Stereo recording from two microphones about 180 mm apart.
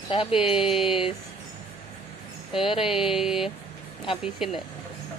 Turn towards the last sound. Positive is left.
turn(degrees=0)  # may be behind; listen again after turning